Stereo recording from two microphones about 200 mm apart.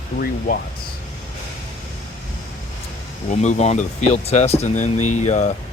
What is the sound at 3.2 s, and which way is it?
Speech, 35° left (ahead or behind).